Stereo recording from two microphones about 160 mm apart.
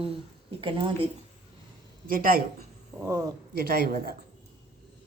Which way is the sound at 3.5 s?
80° right.